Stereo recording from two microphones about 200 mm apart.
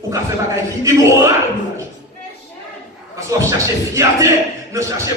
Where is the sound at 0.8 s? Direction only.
15° right (ahead or behind).